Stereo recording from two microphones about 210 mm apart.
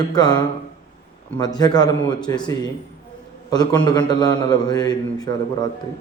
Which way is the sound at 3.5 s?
20° left (ahead or behind).